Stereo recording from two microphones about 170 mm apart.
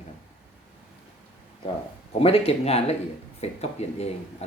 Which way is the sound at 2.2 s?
35° left (ahead or behind).